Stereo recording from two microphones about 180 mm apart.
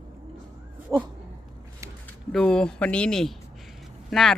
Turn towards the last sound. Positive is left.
turn(degrees=0)  # may be behind; listen again after turning